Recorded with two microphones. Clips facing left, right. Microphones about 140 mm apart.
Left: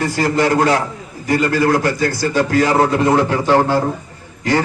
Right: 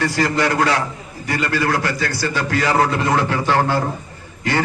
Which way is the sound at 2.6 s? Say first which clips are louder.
Left 4 dB; 25° left (ahead or behind).